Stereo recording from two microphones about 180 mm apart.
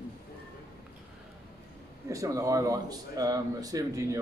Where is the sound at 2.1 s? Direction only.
20° right (ahead or behind).